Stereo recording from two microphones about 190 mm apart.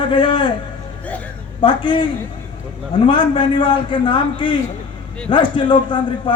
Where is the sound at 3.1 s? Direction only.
25° left (ahead or behind).